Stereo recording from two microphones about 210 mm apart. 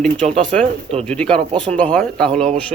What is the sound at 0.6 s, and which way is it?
Speech, 25° right (ahead or behind).